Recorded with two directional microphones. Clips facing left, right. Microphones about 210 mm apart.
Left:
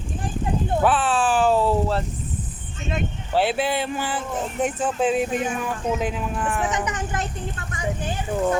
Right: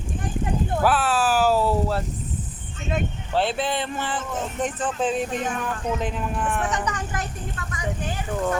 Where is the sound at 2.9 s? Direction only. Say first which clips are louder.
Left 1 dB; 5° left (ahead or behind).